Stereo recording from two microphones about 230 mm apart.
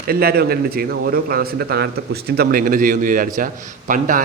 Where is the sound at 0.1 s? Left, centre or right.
Right.